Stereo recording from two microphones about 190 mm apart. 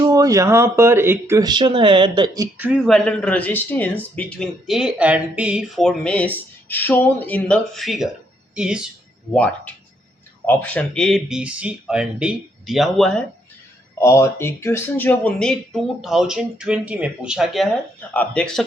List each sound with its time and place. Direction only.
0.0 s speech: 20° right (ahead or behind)
2.6 s speech: centre (ahead or behind)
9.3 s speech: 5° left (ahead or behind)
14.0 s speech: 15° left (ahead or behind)